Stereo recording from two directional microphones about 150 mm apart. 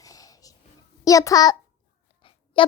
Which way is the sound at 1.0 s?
25° left (ahead or behind).